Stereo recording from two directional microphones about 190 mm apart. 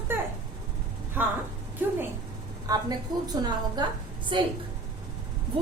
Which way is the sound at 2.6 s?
20° right (ahead or behind).